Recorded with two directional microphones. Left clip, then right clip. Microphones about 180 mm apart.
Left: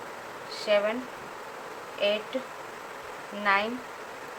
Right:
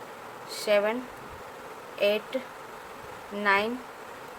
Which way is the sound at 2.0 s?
60° right (ahead or behind).